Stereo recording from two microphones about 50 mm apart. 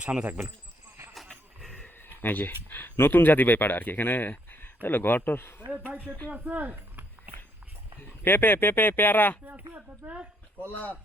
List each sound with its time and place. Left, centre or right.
0.0 s speech: right
2.0 s speech: left
2.9 s speech: left
6.3 s speech: right
8.2 s speech: left
9.5 s speech: right